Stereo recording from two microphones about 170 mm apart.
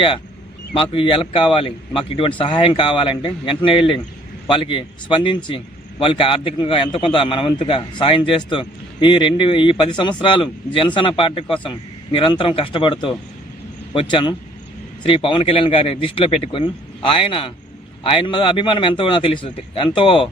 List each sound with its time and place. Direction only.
0.7 s a man's voice: 30° left (ahead or behind)